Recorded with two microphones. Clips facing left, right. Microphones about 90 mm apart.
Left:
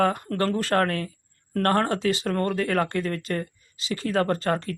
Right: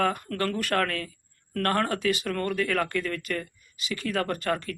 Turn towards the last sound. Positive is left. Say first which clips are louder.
# left 4 dB
turn(degrees=30)  # may be behind; listen again after turning